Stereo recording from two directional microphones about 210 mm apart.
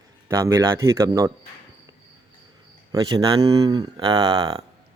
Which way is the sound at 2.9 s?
20° right (ahead or behind).